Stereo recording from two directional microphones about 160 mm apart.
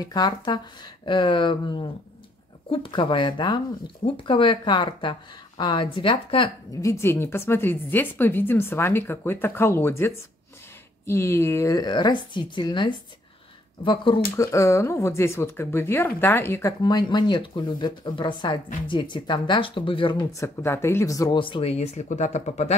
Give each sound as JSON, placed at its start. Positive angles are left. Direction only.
{"t": 0.0, "sound": "speech", "side_deg": 25}
{"t": 6.7, "sound": "a woman's voice", "side_deg": 20}
{"t": 14.3, "sound": "a woman's voice", "side_deg": 20}
{"t": 16.8, "sound": "speech", "side_deg": 30}